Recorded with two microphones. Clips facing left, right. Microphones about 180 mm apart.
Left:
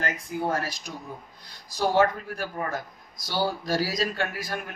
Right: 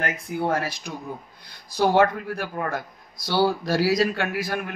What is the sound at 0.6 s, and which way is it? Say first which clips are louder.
A man's voice: right 3 dB; 60° right (ahead or behind).